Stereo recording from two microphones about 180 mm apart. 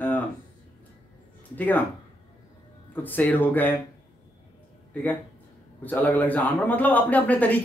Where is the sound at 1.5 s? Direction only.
10° left (ahead or behind).